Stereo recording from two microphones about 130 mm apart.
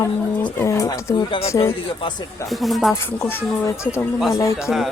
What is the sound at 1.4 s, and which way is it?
Speech, 20° left (ahead or behind).